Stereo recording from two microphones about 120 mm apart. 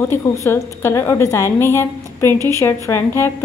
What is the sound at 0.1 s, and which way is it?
A woman's voice, 20° left (ahead or behind).